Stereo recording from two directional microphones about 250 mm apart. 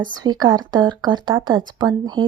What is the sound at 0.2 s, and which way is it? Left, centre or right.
Speech, centre.